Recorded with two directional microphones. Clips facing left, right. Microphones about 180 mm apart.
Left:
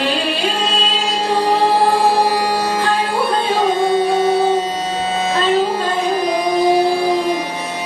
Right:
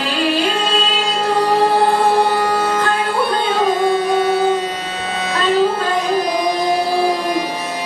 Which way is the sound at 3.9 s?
30° left (ahead or behind).